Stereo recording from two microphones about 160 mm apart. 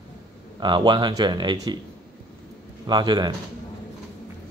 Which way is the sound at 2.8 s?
25° right (ahead or behind).